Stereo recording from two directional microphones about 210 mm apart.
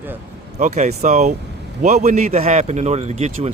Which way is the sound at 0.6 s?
30° right (ahead or behind).